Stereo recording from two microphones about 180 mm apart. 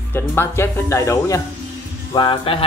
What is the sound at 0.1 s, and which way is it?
Speech, 15° left (ahead or behind).